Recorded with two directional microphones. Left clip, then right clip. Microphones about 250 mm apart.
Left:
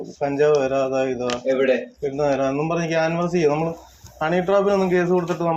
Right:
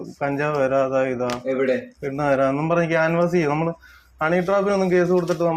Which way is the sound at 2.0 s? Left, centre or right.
Right.